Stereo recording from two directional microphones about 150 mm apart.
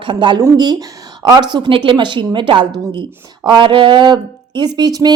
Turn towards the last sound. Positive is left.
turn(degrees=-25)  # may be behind; listen again after turning